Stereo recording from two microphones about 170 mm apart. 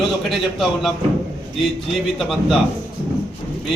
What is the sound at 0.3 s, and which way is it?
A man's voice, centre (ahead or behind).